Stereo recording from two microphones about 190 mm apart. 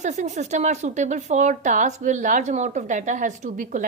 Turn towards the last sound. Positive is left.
turn(degrees=-40)  # may be behind; listen again after turning